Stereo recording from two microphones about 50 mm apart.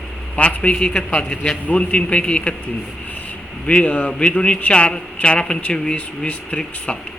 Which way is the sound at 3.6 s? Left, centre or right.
Left.